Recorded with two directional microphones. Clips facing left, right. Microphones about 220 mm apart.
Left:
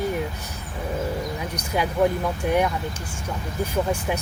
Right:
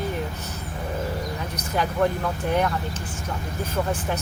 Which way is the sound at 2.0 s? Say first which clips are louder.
Left 2 dB; 10° left (ahead or behind).